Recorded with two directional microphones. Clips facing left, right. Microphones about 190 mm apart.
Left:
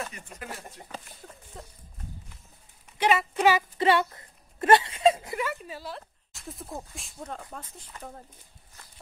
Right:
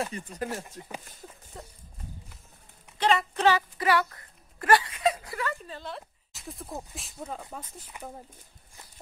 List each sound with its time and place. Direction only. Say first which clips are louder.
0.0 s speech: right 6 dB; 35° right (ahead or behind)
1.5 s speech: right 1 dB; centre (ahead or behind)
3.0 s speech: left 1 dB; 10° left (ahead or behind)
3.7 s speech: left 2 dB; 25° left (ahead or behind)
5.5 s speech: even; 5° left (ahead or behind); by 8.1 s 10° right (ahead or behind)